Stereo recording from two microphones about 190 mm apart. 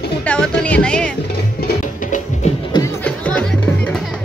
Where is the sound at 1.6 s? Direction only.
40° left (ahead or behind).